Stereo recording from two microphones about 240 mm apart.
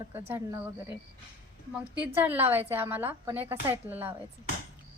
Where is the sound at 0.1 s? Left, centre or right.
Centre.